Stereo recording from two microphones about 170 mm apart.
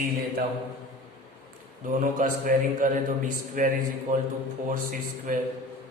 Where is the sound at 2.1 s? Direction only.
50° right (ahead or behind).